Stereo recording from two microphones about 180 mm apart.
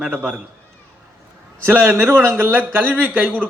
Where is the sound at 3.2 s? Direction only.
5° left (ahead or behind).